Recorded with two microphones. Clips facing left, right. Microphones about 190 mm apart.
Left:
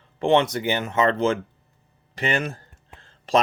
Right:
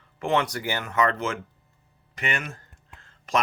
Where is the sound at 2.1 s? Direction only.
30° left (ahead or behind).